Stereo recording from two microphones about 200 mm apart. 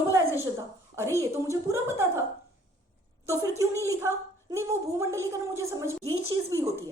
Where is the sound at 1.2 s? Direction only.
15° right (ahead or behind).